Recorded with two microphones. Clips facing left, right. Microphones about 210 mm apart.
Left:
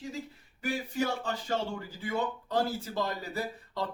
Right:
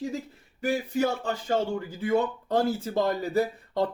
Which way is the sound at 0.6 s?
45° right (ahead or behind).